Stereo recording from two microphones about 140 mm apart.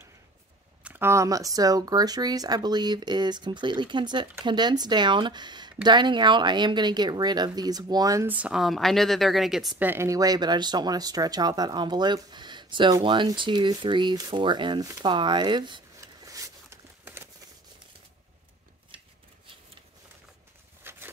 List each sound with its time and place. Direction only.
0.8 s speech: 15° right (ahead or behind)
8.3 s speech: 10° right (ahead or behind)
9.8 s speech: 15° right (ahead or behind)
20.9 s a sound: 15° right (ahead or behind)